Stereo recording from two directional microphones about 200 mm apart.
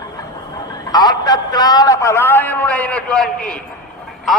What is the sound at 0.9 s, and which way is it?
A man's voice, 20° left (ahead or behind).